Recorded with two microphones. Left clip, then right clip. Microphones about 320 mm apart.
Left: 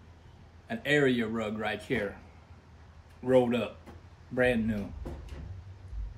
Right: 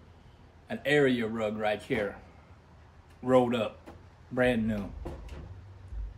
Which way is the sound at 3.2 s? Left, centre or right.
Centre.